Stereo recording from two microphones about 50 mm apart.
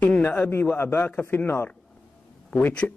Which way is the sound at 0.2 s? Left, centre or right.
Left.